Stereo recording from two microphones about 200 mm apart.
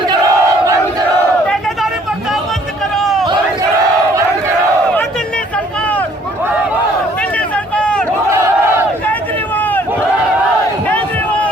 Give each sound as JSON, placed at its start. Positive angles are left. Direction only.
{"t": 0.1, "sound": "battle cry", "side_deg": -15}
{"t": 2.9, "sound": "crowd", "side_deg": 0}
{"t": 7.2, "sound": "a sound", "side_deg": 5}
{"t": 9.6, "sound": "crowd", "side_deg": 10}